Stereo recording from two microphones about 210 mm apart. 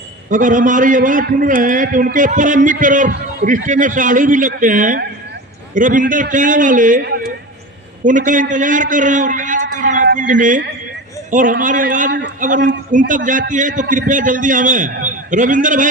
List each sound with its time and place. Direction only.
0.3 s a man's voice: 40° right (ahead or behind)